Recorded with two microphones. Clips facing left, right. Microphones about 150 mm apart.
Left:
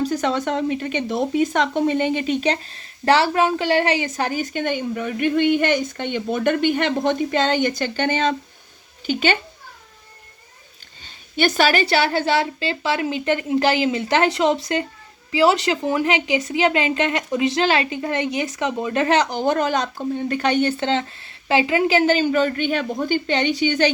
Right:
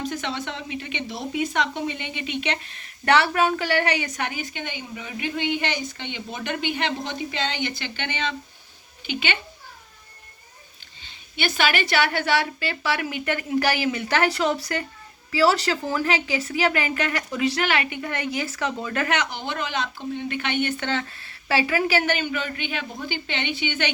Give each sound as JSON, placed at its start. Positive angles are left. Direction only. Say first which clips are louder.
{"t": 0.0, "sound": "a child's voice", "louder": "left 8 dB", "side_deg": 40}
{"t": 11.0, "sound": "a woman's voice", "louder": "left 8 dB", "side_deg": 45}